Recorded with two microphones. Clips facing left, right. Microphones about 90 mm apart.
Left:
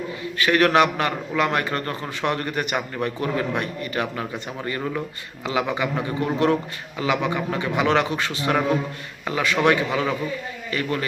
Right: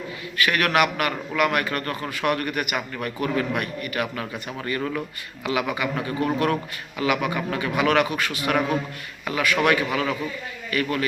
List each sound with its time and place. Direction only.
0.3 s a man's voice: 30° left (ahead or behind)